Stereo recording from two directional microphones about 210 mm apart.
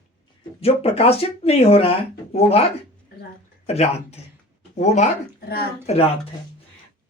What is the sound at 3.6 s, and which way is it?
Speech, 30° left (ahead or behind).